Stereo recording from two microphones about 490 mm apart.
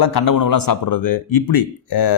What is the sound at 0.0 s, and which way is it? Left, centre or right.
A man's voice, left.